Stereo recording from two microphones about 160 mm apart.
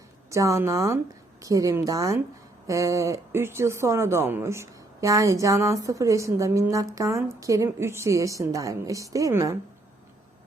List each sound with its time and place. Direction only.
0.3 s speech: 20° right (ahead or behind)